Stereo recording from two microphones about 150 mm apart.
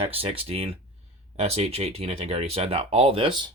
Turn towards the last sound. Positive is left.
turn(degrees=-35)  # may be behind; listen again after turning